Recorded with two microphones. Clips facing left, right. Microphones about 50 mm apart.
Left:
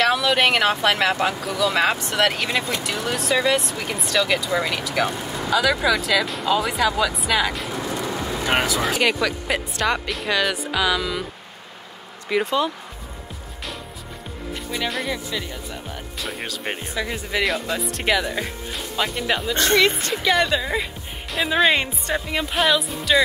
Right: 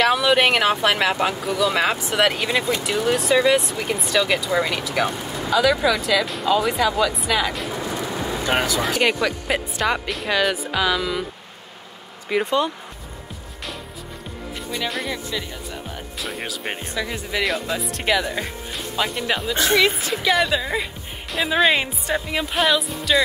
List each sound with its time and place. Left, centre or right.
0.0 s speech: centre
8.5 s speech: centre
12.3 s speech: centre
14.7 s speech: centre